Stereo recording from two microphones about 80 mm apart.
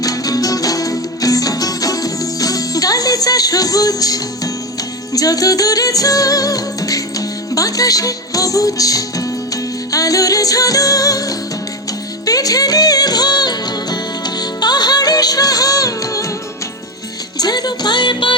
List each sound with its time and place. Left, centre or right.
0.0 s music: left
17.3 s music: left